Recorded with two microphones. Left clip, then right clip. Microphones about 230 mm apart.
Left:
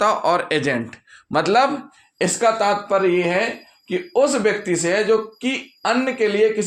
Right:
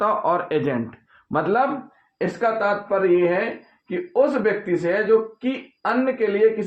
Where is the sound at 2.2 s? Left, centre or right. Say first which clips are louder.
Left 4 dB; left.